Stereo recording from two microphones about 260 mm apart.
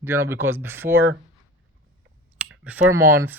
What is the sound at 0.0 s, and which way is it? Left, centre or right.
Speech, centre.